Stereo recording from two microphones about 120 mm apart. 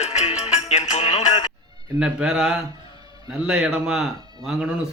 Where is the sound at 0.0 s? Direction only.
65° left (ahead or behind).